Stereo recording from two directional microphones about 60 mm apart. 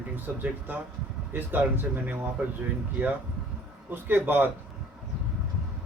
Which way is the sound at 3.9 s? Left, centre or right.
Right.